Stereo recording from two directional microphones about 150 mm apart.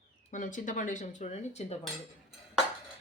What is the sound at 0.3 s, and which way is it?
Speech, 55° left (ahead or behind).